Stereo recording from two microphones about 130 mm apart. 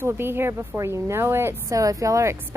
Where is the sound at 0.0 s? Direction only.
20° right (ahead or behind).